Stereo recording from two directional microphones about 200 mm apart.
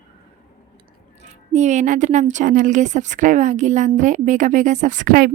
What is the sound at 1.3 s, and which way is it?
A woman's voice, 35° right (ahead or behind).